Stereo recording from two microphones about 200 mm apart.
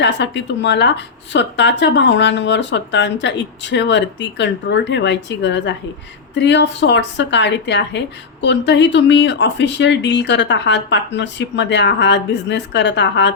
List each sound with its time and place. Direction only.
0.0 s a woman's voice: 60° left (ahead or behind)